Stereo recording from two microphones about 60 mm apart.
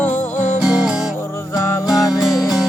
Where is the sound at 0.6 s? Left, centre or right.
Centre.